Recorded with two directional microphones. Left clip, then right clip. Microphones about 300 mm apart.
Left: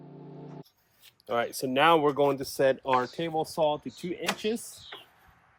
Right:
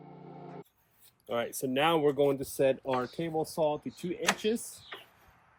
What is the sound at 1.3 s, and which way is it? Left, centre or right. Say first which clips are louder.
Speech: left 4 dB; left.